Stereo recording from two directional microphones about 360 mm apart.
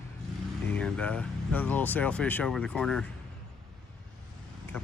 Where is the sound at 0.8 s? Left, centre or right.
Centre.